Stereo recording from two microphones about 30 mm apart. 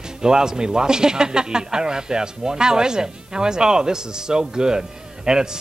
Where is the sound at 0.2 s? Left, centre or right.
Right.